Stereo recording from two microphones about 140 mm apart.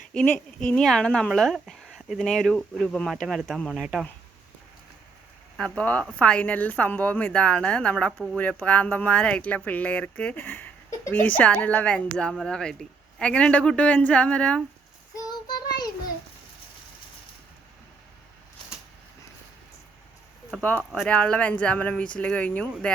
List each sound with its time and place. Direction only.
0.1 s speech: 10° left (ahead or behind)
5.5 s speech: 5° left (ahead or behind)
15.1 s child singing: 25° left (ahead or behind)
20.6 s speech: 10° left (ahead or behind)